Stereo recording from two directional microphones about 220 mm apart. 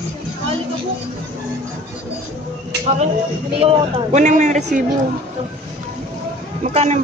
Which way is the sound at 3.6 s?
30° right (ahead or behind).